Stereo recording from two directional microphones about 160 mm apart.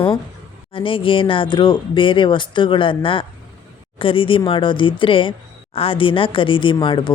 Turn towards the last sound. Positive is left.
turn(degrees=30)  # may be behind; listen again after turning